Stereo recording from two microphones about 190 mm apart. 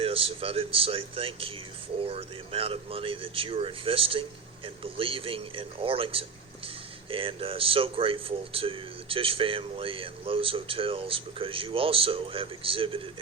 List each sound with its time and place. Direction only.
0.0 s speech: 30° right (ahead or behind)